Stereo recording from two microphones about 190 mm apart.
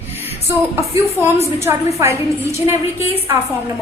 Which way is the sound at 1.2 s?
10° right (ahead or behind).